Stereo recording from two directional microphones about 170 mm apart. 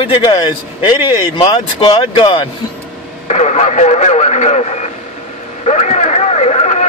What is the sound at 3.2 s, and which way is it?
A man's voice, 40° left (ahead or behind).